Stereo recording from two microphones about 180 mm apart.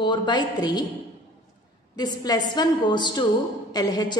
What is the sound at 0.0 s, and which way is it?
Speech, 25° left (ahead or behind).